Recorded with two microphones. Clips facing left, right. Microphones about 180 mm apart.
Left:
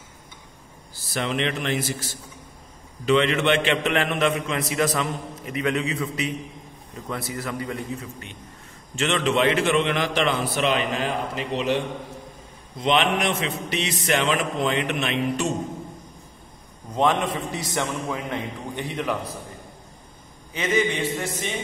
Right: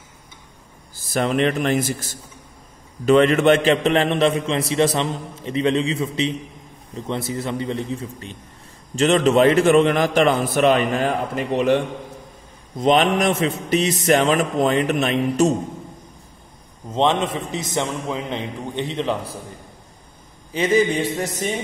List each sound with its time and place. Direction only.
0.9 s a man's voice: 45° right (ahead or behind)
12.7 s mantra: 40° right (ahead or behind)
16.9 s a man's voice: 25° right (ahead or behind)
20.5 s mantra: 35° right (ahead or behind)